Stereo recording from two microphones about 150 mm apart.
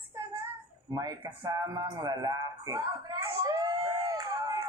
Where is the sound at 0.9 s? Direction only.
25° right (ahead or behind).